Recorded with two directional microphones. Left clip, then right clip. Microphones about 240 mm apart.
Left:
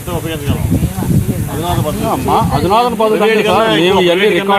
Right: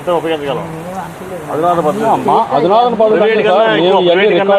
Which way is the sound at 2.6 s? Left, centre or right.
Left.